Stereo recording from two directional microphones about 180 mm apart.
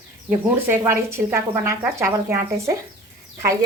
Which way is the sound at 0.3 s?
15° right (ahead or behind).